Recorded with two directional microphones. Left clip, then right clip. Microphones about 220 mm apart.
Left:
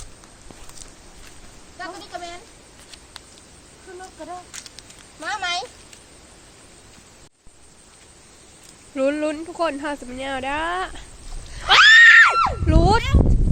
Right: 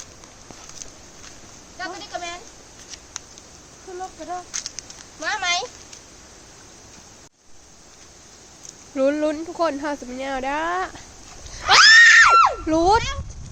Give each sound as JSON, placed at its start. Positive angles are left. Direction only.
{"t": 1.8, "sound": "a sound", "side_deg": -25}
{"t": 4.2, "sound": "speech", "side_deg": 30}
{"t": 5.2, "sound": "speech", "side_deg": -15}
{"t": 9.0, "sound": "speech", "side_deg": -5}
{"t": 11.5, "sound": "screaming", "side_deg": -5}